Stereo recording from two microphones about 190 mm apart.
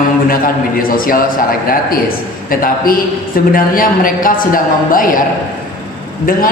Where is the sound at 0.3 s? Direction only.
50° left (ahead or behind).